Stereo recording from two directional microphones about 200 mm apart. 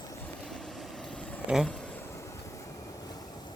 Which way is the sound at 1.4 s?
Centre (ahead or behind).